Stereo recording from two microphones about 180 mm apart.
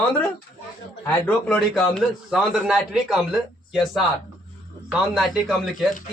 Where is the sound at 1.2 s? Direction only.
5° left (ahead or behind).